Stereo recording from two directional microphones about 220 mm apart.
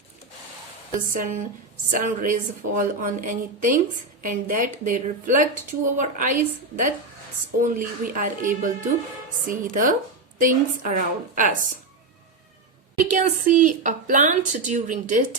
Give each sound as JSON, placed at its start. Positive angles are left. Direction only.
{"t": 1.1, "sound": "a woman's voice", "side_deg": -35}
{"t": 13.1, "sound": "a woman's voice", "side_deg": -35}